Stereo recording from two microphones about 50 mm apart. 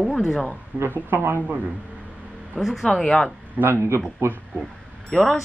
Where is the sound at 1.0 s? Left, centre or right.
Right.